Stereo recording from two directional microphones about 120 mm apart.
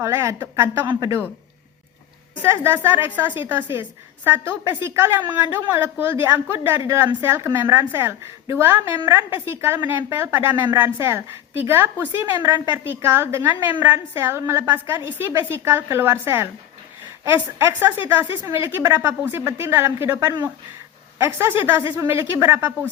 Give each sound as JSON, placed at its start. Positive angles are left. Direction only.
{"t": 0.0, "sound": "a woman's voice", "side_deg": -25}
{"t": 2.4, "sound": "a woman's voice", "side_deg": -20}